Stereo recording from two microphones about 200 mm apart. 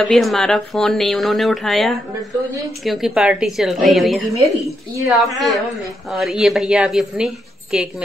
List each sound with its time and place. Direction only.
0.0 s speech: centre (ahead or behind)